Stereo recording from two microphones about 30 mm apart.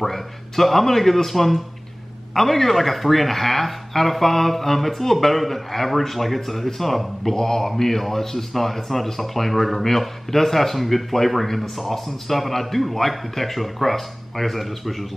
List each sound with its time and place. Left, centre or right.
0.0 s a man's voice: centre
7.3 s a man's voice: centre